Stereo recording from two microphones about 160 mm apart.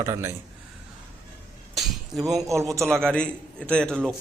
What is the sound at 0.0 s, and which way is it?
Speech, 20° right (ahead or behind).